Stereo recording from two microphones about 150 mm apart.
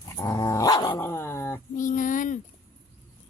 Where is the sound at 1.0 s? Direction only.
15° left (ahead or behind).